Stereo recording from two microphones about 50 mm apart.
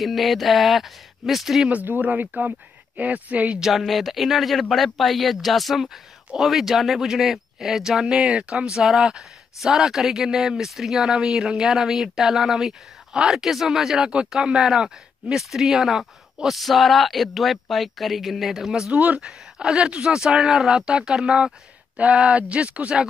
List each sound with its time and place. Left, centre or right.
0.0 s speech: centre
1.7 s speech: right
3.5 s speech: centre
8.7 s speech: centre
18.9 s speech: right
19.2 s speech: centre
21.9 s speech: right